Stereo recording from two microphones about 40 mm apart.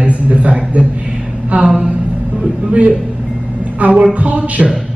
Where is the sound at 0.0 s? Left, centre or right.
Right.